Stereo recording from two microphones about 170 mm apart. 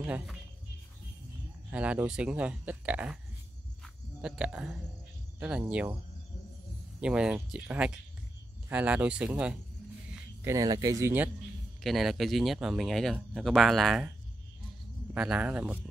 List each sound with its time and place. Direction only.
0.0 s speech: 10° right (ahead or behind)
1.7 s speech: 10° right (ahead or behind)
3.8 s a sound: 5° right (ahead or behind)
5.4 s speech: 5° right (ahead or behind)
7.0 s speech: 5° right (ahead or behind)
10.1 s speech: 15° right (ahead or behind)
11.8 s speech: centre (ahead or behind)
15.1 s speech: 5° right (ahead or behind)